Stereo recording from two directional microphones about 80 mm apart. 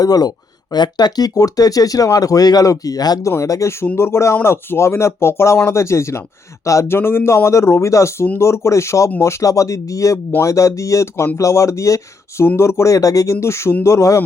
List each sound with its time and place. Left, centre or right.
0.0 s speech: left
3.2 s speech: left
13.3 s speech: left